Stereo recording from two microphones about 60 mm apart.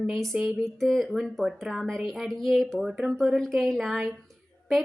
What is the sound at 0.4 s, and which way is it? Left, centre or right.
Speech, centre.